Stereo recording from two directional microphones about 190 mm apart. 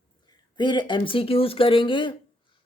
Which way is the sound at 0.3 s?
25° left (ahead or behind).